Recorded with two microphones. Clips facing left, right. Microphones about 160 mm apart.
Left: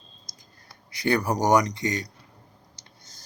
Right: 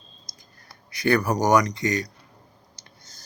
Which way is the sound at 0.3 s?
55° left (ahead or behind).